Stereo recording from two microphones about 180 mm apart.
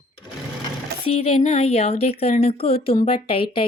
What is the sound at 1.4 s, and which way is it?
A woman's voice, 35° left (ahead or behind).